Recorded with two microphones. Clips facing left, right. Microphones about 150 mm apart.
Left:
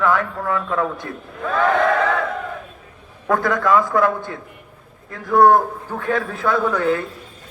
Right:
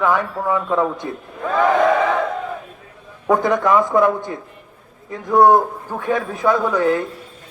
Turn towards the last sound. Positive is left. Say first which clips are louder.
# right 2 dB
turn(degrees=-10)  # may be behind; listen again after turning